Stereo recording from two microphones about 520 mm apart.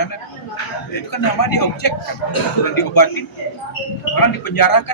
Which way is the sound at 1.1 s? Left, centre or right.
Left.